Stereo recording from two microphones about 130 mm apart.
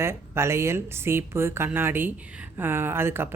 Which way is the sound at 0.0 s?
20° right (ahead or behind).